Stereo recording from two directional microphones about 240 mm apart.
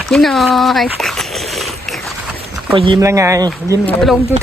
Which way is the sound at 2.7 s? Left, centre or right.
Centre.